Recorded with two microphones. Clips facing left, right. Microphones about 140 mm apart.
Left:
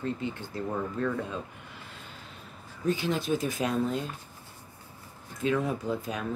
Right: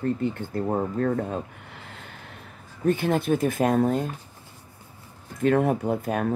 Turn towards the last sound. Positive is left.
turn(degrees=-55)  # may be behind; listen again after turning